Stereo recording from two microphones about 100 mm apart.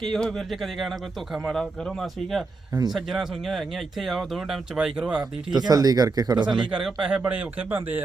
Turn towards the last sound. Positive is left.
turn(degrees=-20)  # may be behind; listen again after turning